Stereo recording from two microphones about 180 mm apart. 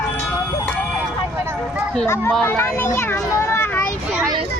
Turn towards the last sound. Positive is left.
turn(degrees=10)  # may be behind; listen again after turning